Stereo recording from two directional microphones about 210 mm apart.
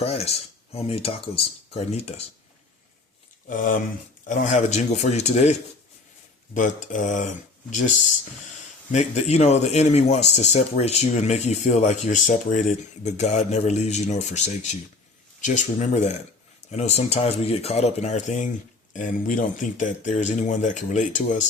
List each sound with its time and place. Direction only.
0.0 s speech: 30° left (ahead or behind)
3.5 s speech: 40° left (ahead or behind)